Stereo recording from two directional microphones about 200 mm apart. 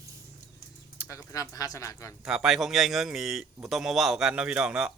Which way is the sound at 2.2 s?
5° right (ahead or behind).